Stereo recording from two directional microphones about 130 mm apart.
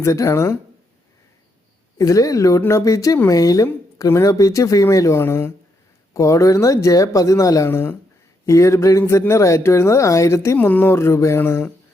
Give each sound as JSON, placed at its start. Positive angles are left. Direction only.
{"t": 0.0, "sound": "speech", "side_deg": 25}
{"t": 2.0, "sound": "speech", "side_deg": 25}